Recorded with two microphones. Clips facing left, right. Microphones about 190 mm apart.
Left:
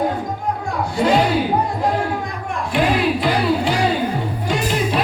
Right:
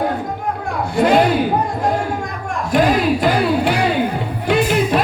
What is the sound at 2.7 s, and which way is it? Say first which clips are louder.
Music: right 3 dB; 45° right (ahead or behind).